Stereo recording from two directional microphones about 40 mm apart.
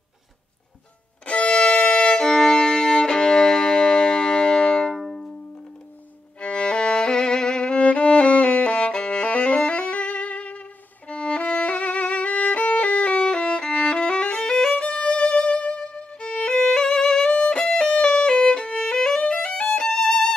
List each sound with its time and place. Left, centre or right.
1.2 s music: left
1.9 s violin: left
2.2 s music: centre
4.9 s music: centre
6.4 s violin: left
9.3 s music: left
11.1 s violin: left
13.2 s violin: left
14.7 s violin: left
15.0 s music: left
18.3 s violin: left